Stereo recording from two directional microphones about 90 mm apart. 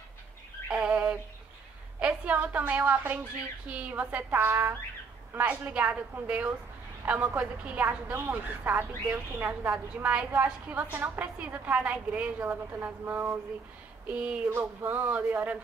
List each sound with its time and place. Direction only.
0.7 s a sound: 15° right (ahead or behind)
2.0 s a woman's voice: 15° right (ahead or behind)
14.5 s a woman's voice: 30° right (ahead or behind)